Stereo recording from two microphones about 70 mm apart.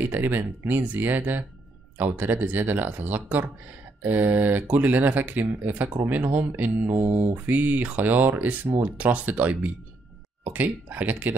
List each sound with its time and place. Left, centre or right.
0.1 s speech: right